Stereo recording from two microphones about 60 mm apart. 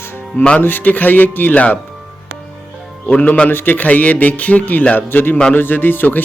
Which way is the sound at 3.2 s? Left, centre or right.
Left.